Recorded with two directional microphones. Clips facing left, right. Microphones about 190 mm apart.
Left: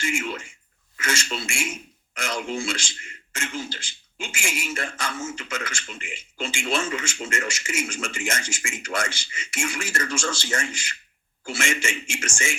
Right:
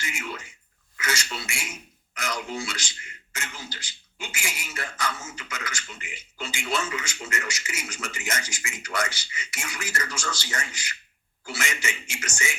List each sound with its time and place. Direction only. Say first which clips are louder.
0.0 s speech: left 7 dB; 30° left (ahead or behind)